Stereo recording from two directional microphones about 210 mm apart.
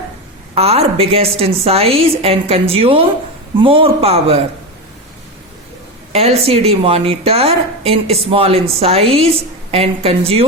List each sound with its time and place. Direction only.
0.5 s a woman's voice: 30° right (ahead or behind)
6.1 s a woman's voice: 30° right (ahead or behind)